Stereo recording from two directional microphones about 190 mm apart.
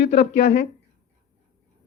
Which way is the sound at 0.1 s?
35° left (ahead or behind).